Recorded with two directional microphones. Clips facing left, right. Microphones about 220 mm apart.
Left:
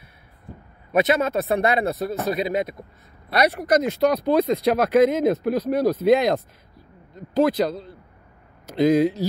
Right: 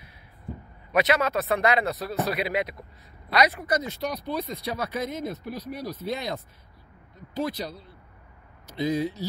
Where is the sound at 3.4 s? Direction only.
75° left (ahead or behind).